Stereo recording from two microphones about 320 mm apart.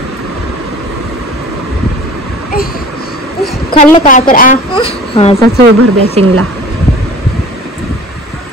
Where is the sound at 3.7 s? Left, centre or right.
Centre.